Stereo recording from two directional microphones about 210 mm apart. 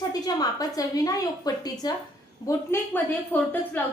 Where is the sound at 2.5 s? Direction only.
10° left (ahead or behind).